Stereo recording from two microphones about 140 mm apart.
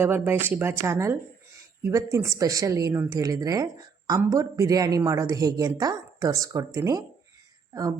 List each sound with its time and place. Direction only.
0.0 s a woman's voice: 15° right (ahead or behind)